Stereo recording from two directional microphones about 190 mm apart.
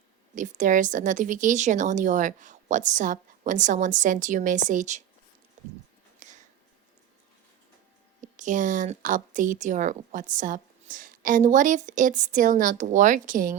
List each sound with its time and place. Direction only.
0.3 s speech: 40° right (ahead or behind)
6.2 s a sound: 40° right (ahead or behind)
8.2 s a woman's voice: 40° right (ahead or behind)